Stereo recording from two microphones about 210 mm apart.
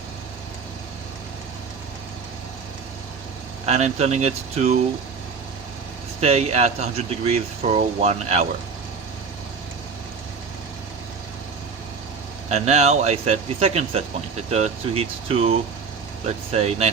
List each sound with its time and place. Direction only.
3.7 s speech: 30° right (ahead or behind)
6.1 s speech: 30° right (ahead or behind)
12.5 s speech: 30° right (ahead or behind)